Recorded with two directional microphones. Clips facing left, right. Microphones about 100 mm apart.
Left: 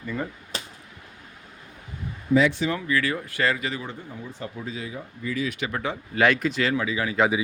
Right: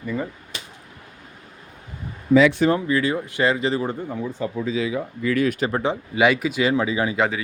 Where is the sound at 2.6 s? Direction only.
30° right (ahead or behind).